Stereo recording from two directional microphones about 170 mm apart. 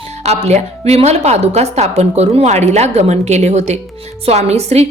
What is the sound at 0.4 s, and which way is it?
A woman's voice, 40° right (ahead or behind).